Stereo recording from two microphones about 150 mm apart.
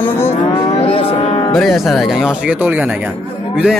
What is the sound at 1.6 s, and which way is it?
Speech, centre (ahead or behind).